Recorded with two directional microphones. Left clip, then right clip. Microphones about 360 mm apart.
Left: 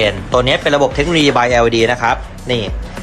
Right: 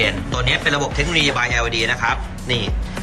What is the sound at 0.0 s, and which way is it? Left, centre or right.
Speech, centre.